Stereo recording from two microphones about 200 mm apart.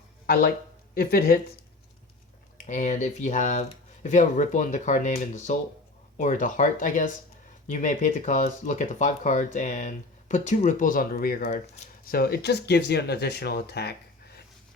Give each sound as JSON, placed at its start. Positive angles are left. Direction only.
{"t": 0.9, "sound": "speech", "side_deg": 50}
{"t": 2.6, "sound": "speech", "side_deg": 35}